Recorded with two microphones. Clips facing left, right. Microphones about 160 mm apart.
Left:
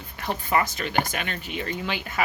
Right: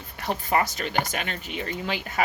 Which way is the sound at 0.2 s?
40° right (ahead or behind).